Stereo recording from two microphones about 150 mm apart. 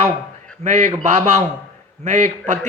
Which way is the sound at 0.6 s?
50° right (ahead or behind).